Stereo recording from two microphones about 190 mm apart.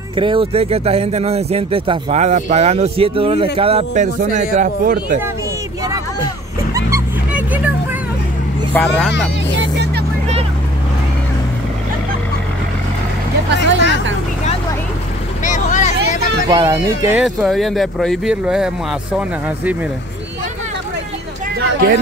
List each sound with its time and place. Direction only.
0.1 s speech: 25° right (ahead or behind); by 5.0 s 45° right (ahead or behind)
6.7 s music: 10° right (ahead or behind)
8.7 s speech: 5° left (ahead or behind)
15.4 s vehicle: 40° left (ahead or behind)
16.4 s speech: 20° right (ahead or behind)
17.2 s speech: centre (ahead or behind)
21.5 s a sound: 60° right (ahead or behind)